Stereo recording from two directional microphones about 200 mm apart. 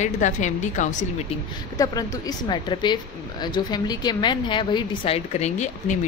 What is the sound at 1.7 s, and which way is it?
A woman's voice, 15° left (ahead or behind).